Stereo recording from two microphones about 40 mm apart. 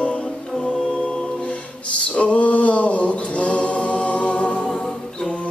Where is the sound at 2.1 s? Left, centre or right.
Left.